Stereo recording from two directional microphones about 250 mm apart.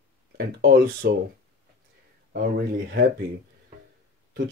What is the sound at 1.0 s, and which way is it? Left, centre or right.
Speech, right.